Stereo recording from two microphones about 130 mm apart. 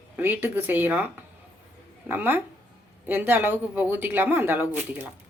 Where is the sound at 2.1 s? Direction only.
15° right (ahead or behind).